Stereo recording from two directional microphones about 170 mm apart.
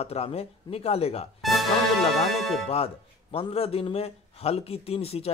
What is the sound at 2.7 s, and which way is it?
A man's voice, 35° left (ahead or behind).